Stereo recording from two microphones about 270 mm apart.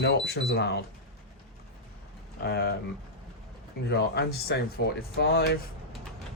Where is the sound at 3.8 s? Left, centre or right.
Left.